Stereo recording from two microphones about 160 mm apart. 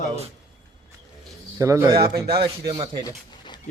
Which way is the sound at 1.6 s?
20° right (ahead or behind).